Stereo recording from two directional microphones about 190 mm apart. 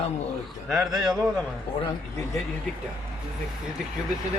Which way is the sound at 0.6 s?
Centre (ahead or behind).